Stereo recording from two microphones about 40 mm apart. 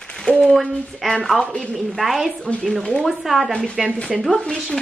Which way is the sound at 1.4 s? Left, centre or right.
Left.